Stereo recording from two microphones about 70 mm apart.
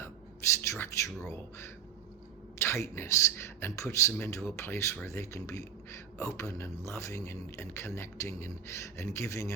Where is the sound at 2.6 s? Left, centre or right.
Left.